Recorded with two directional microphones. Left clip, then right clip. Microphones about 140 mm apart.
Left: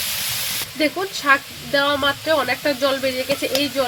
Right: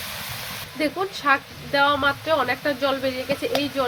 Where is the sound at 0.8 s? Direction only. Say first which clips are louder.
Left 3 dB; 45° left (ahead or behind).